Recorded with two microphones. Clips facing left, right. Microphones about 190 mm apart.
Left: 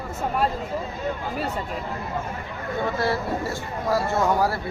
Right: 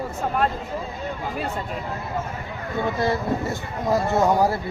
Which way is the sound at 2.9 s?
20° right (ahead or behind).